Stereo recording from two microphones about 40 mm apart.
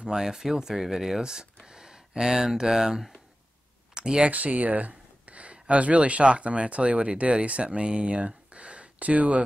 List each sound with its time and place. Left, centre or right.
0.0 s speech: centre
4.3 s speech: right